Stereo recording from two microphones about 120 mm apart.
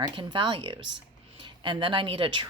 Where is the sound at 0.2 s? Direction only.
40° right (ahead or behind).